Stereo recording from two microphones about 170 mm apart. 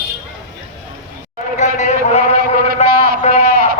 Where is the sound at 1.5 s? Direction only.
45° left (ahead or behind).